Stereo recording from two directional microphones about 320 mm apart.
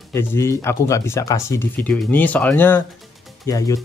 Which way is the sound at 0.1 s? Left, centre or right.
Centre.